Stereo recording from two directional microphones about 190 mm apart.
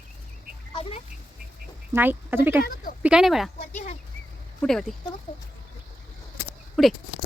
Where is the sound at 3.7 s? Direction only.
40° left (ahead or behind).